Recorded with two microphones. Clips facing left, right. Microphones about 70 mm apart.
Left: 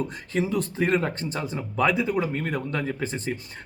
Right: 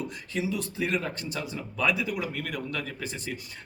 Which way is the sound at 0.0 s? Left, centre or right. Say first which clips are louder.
Left 5 dB; left.